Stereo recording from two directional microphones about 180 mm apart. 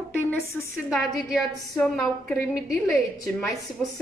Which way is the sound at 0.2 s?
15° left (ahead or behind).